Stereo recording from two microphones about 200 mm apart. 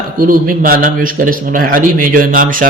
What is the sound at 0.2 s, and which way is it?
A man's voice, 45° right (ahead or behind).